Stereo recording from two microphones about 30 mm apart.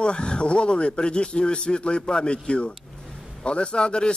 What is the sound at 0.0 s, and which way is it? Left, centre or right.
A man's voice, left.